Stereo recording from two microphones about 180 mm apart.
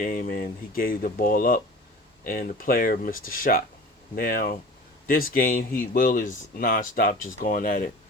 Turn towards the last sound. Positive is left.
turn(degrees=45)  # may be behind; listen again after turning